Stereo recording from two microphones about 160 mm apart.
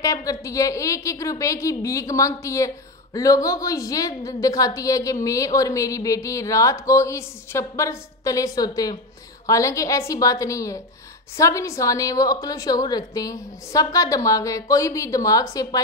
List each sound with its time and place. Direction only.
0.0 s a woman's voice: 20° left (ahead or behind)